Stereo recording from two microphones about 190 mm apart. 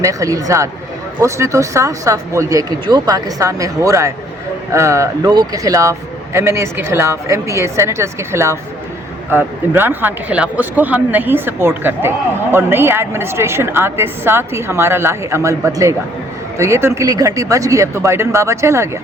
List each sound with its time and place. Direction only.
0.0 s speech: 15° right (ahead or behind)